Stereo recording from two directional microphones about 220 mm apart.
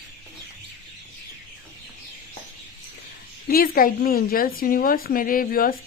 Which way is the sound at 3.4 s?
40° left (ahead or behind).